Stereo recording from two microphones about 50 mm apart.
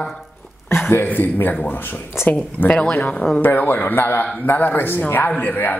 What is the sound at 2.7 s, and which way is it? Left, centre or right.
Speech, left.